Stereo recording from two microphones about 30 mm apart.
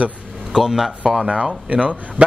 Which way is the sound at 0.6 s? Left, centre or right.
Centre.